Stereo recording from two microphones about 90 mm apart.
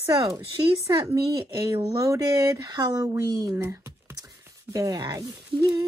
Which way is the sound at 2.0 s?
40° right (ahead or behind).